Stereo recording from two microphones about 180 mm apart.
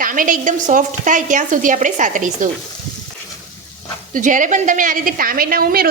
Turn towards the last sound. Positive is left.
turn(degrees=-55)  # may be behind; listen again after turning